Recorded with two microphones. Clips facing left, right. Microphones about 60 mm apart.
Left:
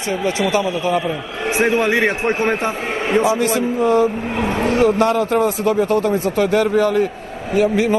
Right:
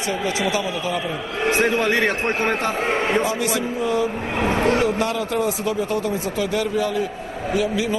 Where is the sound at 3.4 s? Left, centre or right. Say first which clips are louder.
Left 5 dB; left.